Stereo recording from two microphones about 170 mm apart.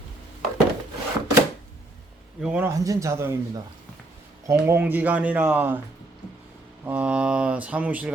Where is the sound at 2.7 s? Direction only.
20° right (ahead or behind).